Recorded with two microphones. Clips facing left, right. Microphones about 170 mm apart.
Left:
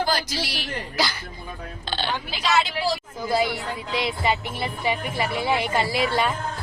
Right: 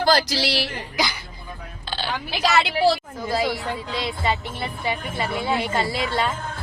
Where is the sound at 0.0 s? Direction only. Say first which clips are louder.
Right 5 dB; 80° right.